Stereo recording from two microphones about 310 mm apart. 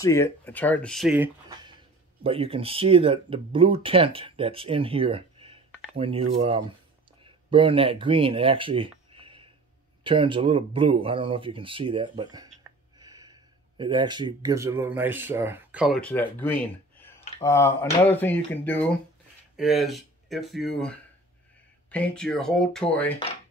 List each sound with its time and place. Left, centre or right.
0.0 s speech: centre
2.2 s speech: centre
21.9 s speech: centre